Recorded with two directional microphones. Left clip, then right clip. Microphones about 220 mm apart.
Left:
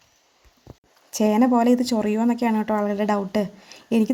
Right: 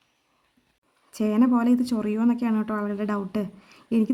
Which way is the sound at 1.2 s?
30° right (ahead or behind).